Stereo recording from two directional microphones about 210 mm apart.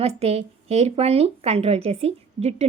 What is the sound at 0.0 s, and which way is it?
Speech, 30° right (ahead or behind).